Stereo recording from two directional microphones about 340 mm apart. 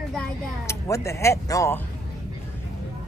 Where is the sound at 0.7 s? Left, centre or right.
Centre.